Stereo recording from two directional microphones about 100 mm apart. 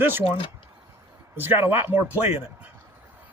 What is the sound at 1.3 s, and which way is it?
Speech, 20° right (ahead or behind).